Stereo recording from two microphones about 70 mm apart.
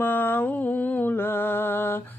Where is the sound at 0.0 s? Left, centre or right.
Left.